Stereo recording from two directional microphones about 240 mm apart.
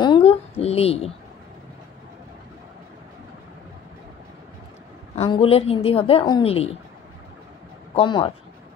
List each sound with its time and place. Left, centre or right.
0.0 s a sound: left
5.1 s a woman's voice: left
7.9 s speech: left